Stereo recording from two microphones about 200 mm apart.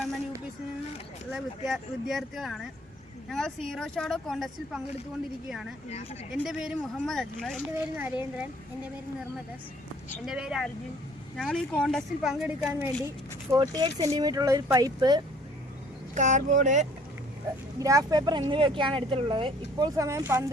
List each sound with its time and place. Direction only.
1.3 s speech: centre (ahead or behind)
10.2 s speech: 5° right (ahead or behind)
13.5 s speech: 20° right (ahead or behind)
16.1 s speech: 40° right (ahead or behind)
17.7 s speech: 15° right (ahead or behind)